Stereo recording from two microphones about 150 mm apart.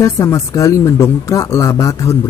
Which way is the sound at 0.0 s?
20° left (ahead or behind).